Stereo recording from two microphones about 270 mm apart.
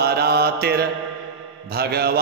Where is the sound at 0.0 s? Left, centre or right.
Right.